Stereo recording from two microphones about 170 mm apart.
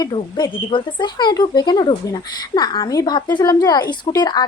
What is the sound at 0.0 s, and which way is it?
Speech, 25° left (ahead or behind).